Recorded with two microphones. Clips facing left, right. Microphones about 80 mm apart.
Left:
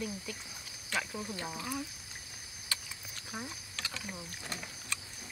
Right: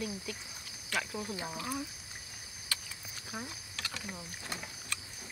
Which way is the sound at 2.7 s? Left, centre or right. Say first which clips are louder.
Even; left.